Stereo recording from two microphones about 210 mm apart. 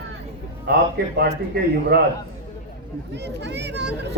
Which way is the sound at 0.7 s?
50° right (ahead or behind).